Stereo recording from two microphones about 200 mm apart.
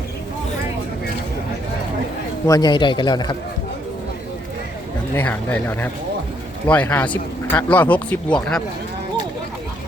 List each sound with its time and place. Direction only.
2.5 s a man's voice: 20° left (ahead or behind)
5.1 s speech: 10° left (ahead or behind)